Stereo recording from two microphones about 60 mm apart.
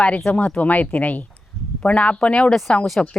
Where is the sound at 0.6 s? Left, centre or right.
Left; by 2.7 s centre.